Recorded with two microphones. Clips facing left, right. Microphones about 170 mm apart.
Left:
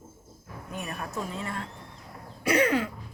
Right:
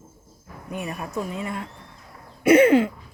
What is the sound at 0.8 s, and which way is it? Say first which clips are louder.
Speech: right 5 dB; 15° right (ahead or behind).